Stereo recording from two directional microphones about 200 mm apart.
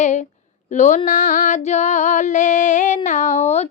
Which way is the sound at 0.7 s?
35° left (ahead or behind).